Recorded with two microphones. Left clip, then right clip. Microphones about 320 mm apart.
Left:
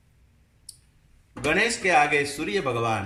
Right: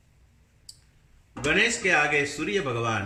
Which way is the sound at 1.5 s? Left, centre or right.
Centre.